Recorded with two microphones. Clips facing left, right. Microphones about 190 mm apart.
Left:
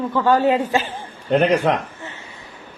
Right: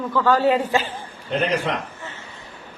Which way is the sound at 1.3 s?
60° left (ahead or behind).